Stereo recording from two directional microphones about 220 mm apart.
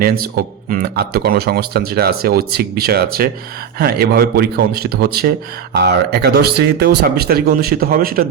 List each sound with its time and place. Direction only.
0.7 s speech: 45° right (ahead or behind)